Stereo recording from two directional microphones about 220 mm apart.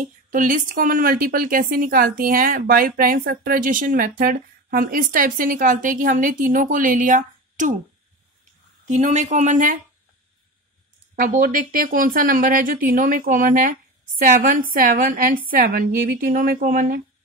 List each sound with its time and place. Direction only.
0.0 s a woman's voice: 35° right (ahead or behind)
8.8 s a woman's voice: 30° right (ahead or behind)
11.1 s a woman's voice: 40° right (ahead or behind)